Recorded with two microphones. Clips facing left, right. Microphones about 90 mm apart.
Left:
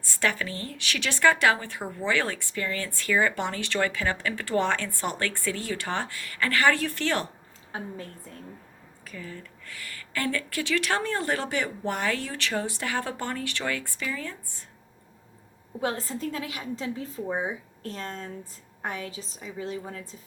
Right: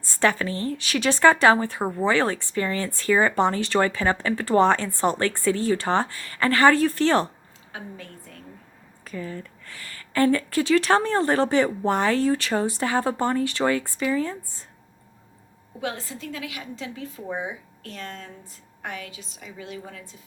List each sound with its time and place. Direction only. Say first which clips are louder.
0.0 s speech: right 6 dB; 30° right (ahead or behind)
7.7 s a woman's voice: left 2 dB; 35° left (ahead or behind)
9.0 s speech: right 7 dB; 40° right (ahead or behind)
15.8 s a woman's voice: left 2 dB; 40° left (ahead or behind)